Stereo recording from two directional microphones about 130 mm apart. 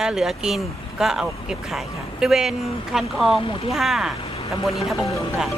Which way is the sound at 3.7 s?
Centre (ahead or behind).